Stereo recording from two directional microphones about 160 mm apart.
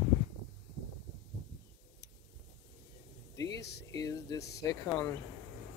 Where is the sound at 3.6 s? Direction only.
90° left.